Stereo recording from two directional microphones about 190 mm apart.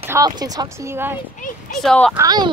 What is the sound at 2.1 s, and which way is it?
Speech, 20° right (ahead or behind).